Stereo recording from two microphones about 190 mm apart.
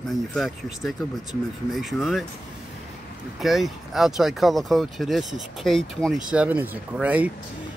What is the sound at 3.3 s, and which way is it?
Speech, centre (ahead or behind).